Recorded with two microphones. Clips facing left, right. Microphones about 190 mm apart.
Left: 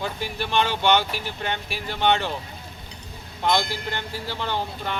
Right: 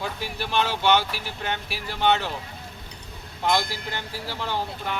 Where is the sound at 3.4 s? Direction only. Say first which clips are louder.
Left 1 dB; 5° right (ahead or behind).